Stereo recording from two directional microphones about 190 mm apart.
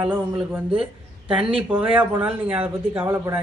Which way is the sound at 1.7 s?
10° right (ahead or behind).